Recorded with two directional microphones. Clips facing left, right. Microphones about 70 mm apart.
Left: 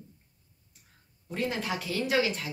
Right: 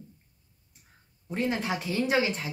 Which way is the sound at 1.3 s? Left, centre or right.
Right.